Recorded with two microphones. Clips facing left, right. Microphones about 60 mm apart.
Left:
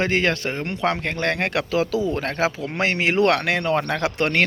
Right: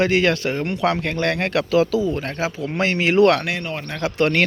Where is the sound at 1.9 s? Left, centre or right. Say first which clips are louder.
Right 1 dB; left.